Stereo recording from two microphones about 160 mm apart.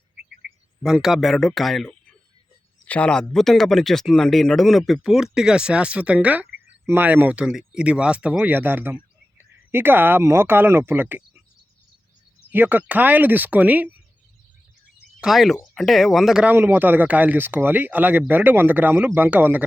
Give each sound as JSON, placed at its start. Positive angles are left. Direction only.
{"t": 0.2, "sound": "a sound", "side_deg": -90}
{"t": 0.8, "sound": "speech", "side_deg": -5}
{"t": 12.5, "sound": "speech", "side_deg": -10}
{"t": 15.2, "sound": "speech", "side_deg": 0}